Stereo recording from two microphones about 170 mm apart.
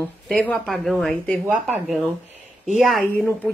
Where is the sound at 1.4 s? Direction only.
10° right (ahead or behind).